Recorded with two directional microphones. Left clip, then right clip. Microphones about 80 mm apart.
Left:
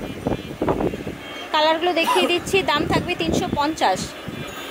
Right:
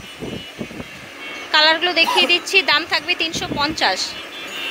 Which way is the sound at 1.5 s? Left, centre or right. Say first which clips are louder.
Right 3 dB; left.